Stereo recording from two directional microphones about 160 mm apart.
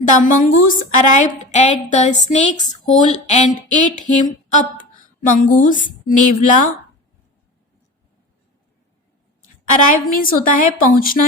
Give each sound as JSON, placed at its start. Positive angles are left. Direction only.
{"t": 0.1, "sound": "a sound", "side_deg": 55}
{"t": 6.1, "sound": "a woman's voice", "side_deg": 55}
{"t": 9.8, "sound": "a woman's voice", "side_deg": 60}